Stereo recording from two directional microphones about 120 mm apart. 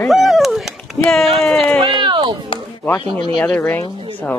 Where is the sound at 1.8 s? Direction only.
40° right (ahead or behind).